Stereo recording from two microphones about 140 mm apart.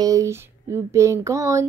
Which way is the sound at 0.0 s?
25° right (ahead or behind).